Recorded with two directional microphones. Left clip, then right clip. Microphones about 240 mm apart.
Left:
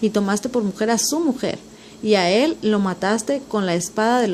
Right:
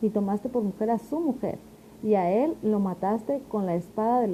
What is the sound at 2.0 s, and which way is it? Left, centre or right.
A woman's voice, left.